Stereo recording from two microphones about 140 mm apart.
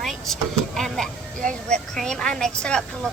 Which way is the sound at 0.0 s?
Centre (ahead or behind).